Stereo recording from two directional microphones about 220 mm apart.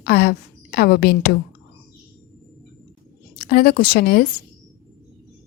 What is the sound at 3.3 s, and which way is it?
Speech, 45° left (ahead or behind).